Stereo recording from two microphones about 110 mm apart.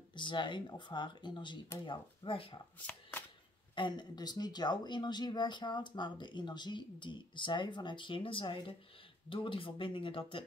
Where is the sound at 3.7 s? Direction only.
45° left (ahead or behind).